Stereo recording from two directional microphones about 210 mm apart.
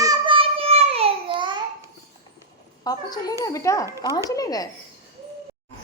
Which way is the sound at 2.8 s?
20° left (ahead or behind).